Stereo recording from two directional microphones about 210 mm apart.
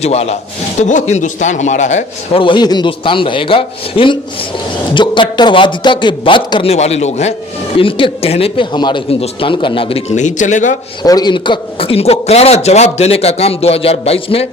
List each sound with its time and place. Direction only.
0.0 s a man's voice: 30° left (ahead or behind)
11.0 s a man's voice: 20° left (ahead or behind)